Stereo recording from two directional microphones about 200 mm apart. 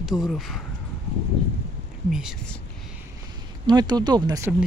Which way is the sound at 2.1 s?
Centre (ahead or behind).